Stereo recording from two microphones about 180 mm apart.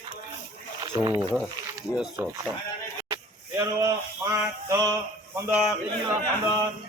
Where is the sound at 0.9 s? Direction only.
15° right (ahead or behind).